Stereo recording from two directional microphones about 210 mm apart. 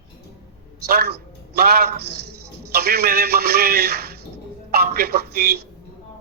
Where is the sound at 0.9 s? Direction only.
50° right (ahead or behind).